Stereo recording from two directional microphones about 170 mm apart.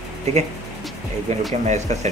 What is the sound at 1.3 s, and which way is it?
Speech, 40° right (ahead or behind).